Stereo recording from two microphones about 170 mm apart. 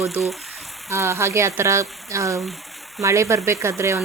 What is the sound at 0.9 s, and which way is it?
A woman's voice, 15° right (ahead or behind).